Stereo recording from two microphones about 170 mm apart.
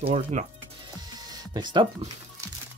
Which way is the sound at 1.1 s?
25° right (ahead or behind).